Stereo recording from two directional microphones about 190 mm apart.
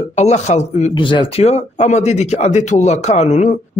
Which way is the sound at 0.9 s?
25° left (ahead or behind).